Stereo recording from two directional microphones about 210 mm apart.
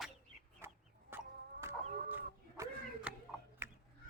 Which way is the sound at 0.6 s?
10° right (ahead or behind).